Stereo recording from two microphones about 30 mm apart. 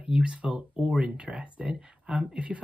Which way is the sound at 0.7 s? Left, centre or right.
Right.